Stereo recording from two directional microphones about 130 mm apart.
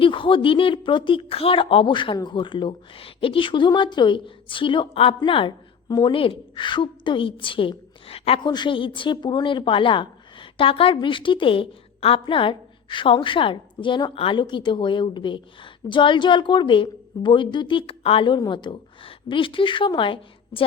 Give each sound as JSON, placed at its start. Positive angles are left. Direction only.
{"t": 0.0, "sound": "a woman's voice", "side_deg": 40}
{"t": 8.4, "sound": "a woman's voice", "side_deg": 35}
{"t": 18.3, "sound": "a woman's voice", "side_deg": 35}